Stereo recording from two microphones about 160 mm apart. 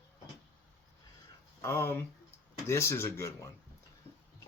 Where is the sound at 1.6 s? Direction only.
15° left (ahead or behind).